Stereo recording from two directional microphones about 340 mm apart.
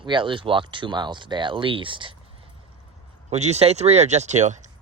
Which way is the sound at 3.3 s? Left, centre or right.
Centre.